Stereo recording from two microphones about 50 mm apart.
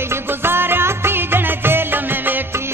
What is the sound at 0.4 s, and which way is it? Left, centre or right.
Music, right.